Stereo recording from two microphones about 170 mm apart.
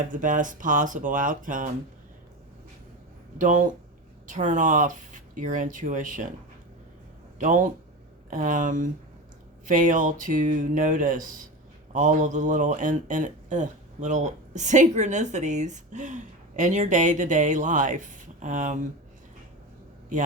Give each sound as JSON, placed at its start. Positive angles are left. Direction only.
{"t": 0.0, "sound": "speech", "side_deg": -50}
{"t": 3.3, "sound": "speech", "side_deg": -50}
{"t": 7.3, "sound": "speech", "side_deg": -50}